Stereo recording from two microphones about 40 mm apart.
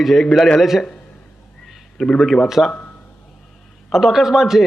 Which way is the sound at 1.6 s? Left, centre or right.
Centre.